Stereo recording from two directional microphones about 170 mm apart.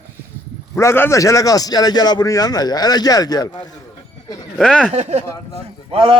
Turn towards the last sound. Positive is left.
turn(degrees=-30)  # may be behind; listen again after turning